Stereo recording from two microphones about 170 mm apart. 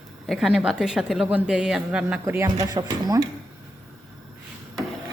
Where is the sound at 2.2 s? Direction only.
15° right (ahead or behind).